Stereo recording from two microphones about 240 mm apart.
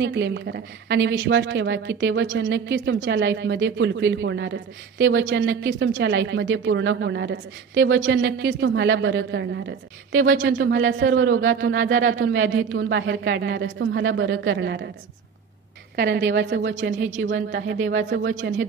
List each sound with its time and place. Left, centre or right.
0.0 s a woman's voice: right
16.0 s a woman's voice: right